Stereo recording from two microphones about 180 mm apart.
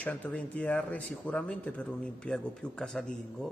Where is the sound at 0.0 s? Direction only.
10° left (ahead or behind).